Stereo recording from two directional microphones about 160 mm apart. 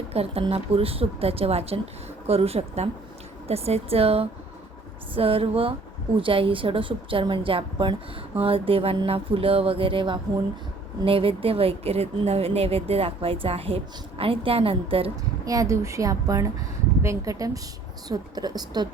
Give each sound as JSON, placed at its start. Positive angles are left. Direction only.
{"t": 0.1, "sound": "speech", "side_deg": -40}
{"t": 15.4, "sound": "a woman's voice", "side_deg": -20}